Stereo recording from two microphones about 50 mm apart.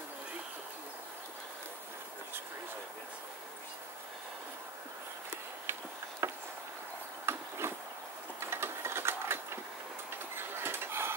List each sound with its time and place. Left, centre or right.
6.2 s a sound: right
8.4 s sewing machine: right
10.3 s dishes: right